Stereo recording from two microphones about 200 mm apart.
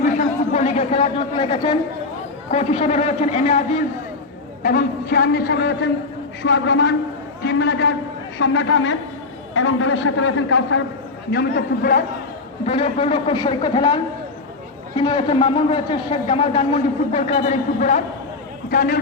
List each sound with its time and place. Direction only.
0.0 s chatter: 35° left (ahead or behind)
2.5 s a woman's voice: 30° left (ahead or behind)
4.6 s a man's voice: 45° left (ahead or behind)
8.4 s a man's voice: 75° left (ahead or behind)
11.3 s a man's voice: 50° left (ahead or behind)
12.6 s a man's voice: 30° left (ahead or behind)